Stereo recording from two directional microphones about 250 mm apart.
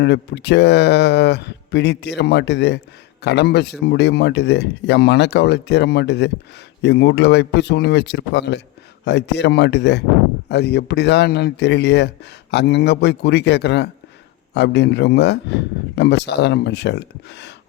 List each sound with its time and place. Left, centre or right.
0.0 s speech: left